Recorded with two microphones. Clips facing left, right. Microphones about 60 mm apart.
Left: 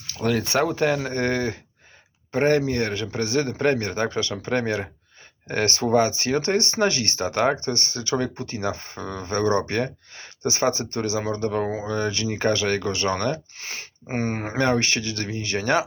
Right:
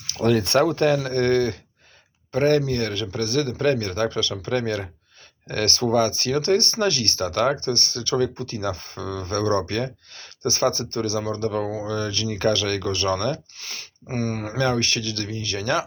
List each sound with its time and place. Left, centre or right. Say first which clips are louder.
0.1 s speech: right 4 dB; centre; by 15.8 s left